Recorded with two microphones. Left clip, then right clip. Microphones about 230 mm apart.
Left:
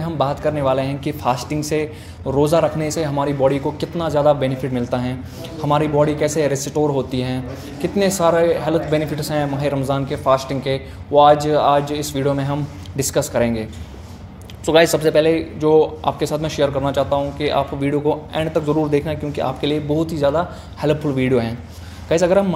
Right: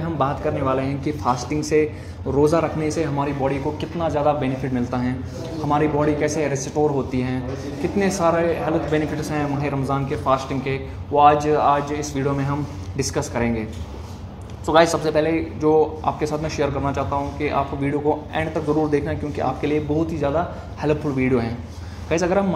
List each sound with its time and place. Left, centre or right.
0.2 s speech: left
14.8 s speech: left